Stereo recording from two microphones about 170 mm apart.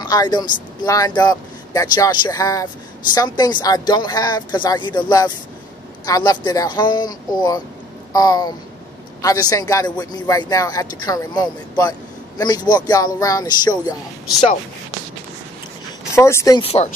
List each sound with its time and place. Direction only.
0.0 s speech: 25° left (ahead or behind)
16.2 s speech: 15° left (ahead or behind)
16.6 s speech: 40° left (ahead or behind)